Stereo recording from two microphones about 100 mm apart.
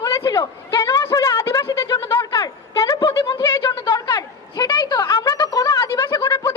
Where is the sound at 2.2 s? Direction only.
30° left (ahead or behind).